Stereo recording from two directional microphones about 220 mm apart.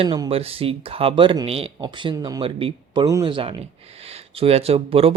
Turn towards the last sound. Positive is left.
turn(degrees=-25)  # may be behind; listen again after turning